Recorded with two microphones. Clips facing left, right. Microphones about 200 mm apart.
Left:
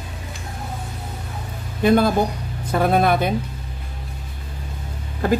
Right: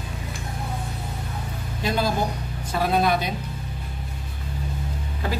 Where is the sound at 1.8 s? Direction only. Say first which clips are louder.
Left 8 dB; 55° left (ahead or behind).